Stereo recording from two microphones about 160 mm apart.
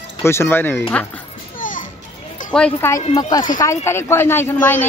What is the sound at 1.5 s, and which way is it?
Children playing, 55° left (ahead or behind).